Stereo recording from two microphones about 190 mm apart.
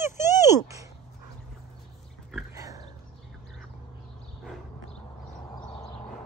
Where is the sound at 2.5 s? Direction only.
15° right (ahead or behind).